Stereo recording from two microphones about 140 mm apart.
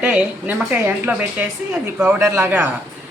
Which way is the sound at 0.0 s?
10° right (ahead or behind).